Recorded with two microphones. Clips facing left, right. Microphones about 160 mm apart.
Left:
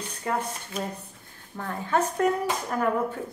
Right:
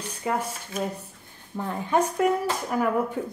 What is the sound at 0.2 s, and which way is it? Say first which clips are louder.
A woman's voice: right 1 dB; 10° right (ahead or behind).